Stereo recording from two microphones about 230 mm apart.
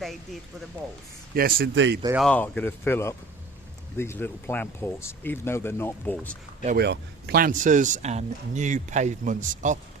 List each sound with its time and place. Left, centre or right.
1.4 s speech: right
2.1 s speech: centre
6.7 s speech: right